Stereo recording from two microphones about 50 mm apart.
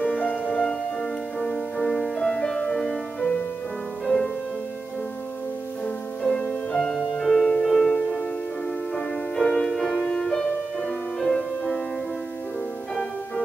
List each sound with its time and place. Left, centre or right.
0.0 s music: left; by 4.3 s centre
5.9 s music: centre
7.0 s music: centre
8.9 s music: centre